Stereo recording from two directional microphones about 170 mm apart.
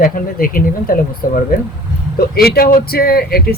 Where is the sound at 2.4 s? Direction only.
65° left (ahead or behind).